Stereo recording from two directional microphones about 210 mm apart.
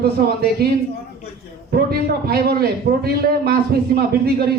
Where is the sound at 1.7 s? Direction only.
50° right (ahead or behind).